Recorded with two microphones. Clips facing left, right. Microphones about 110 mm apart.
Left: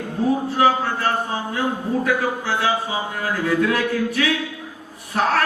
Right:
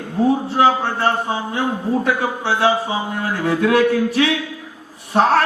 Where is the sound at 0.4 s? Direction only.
30° right (ahead or behind).